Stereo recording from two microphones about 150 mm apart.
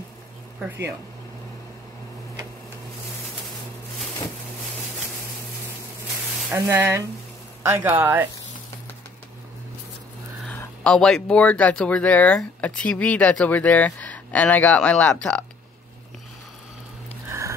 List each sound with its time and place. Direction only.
0.7 s speech: 15° right (ahead or behind)
6.5 s speech: 15° right (ahead or behind)
10.5 s speech: 10° left (ahead or behind)